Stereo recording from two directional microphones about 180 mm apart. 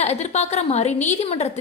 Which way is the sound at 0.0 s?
40° left (ahead or behind).